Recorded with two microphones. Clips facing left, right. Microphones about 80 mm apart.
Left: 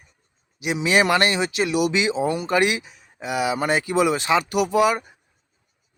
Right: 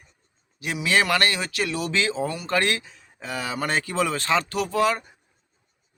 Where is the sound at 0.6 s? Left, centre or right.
Centre.